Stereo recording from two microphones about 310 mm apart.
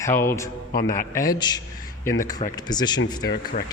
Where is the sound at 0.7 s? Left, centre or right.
Left.